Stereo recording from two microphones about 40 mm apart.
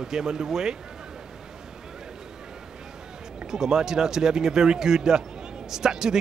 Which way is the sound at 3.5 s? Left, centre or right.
Centre.